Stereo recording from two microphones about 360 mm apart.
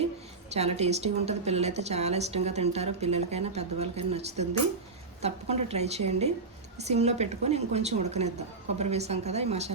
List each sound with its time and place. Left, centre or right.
0.5 s a woman's voice: centre